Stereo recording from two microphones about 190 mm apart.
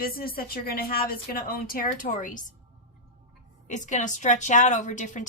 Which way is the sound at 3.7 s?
40° left (ahead or behind).